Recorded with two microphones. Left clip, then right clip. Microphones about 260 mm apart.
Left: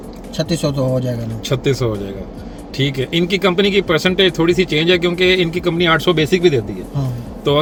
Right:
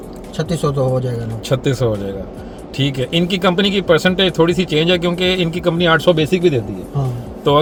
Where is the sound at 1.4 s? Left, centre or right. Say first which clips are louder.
Right 1 dB; centre.